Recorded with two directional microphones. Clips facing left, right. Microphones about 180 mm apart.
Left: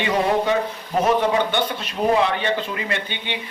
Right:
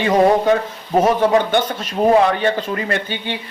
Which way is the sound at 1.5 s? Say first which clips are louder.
Right 5 dB; 45° right (ahead or behind).